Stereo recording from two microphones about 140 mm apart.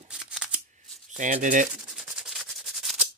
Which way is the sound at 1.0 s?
65° right (ahead or behind).